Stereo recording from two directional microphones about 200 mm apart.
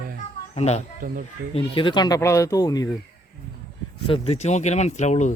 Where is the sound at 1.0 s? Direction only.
45° right (ahead or behind).